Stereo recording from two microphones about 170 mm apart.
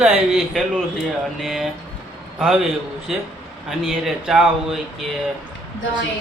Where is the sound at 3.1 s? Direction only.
5° right (ahead or behind).